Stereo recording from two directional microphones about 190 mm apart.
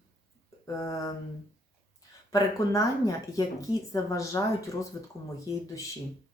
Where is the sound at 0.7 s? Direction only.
15° left (ahead or behind).